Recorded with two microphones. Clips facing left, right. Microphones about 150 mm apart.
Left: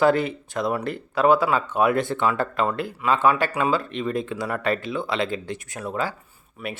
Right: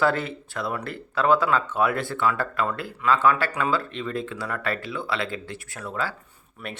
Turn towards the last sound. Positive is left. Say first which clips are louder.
# left 4 dB
turn(degrees=5)  # may be behind; listen again after turning